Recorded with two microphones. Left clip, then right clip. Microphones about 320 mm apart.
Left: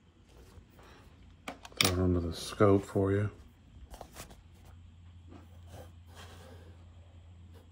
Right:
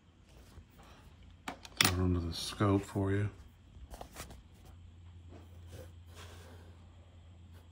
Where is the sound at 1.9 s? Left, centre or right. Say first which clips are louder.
Left 4 dB; left.